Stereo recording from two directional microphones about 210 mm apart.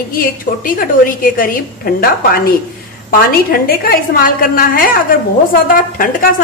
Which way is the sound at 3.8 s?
45° left (ahead or behind).